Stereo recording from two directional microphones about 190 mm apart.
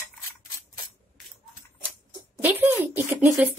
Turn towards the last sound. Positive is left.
turn(degrees=-10)  # may be behind; listen again after turning